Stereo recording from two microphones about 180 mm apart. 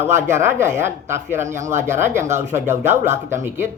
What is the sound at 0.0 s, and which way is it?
Speech, 15° right (ahead or behind).